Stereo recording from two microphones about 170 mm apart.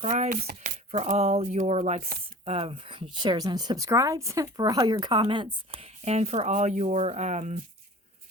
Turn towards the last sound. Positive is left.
turn(degrees=-45)  # may be behind; listen again after turning